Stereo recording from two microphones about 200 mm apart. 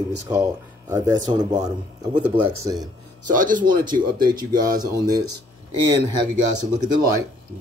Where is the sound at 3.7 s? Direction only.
20° right (ahead or behind).